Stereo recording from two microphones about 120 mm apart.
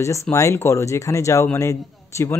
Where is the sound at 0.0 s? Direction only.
25° left (ahead or behind).